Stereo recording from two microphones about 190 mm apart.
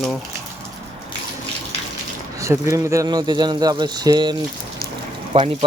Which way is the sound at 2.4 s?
15° right (ahead or behind).